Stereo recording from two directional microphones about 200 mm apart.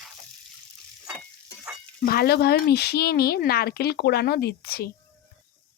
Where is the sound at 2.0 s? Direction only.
50° left (ahead or behind).